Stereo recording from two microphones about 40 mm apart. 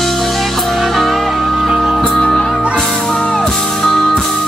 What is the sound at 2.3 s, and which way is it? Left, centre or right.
Music, centre.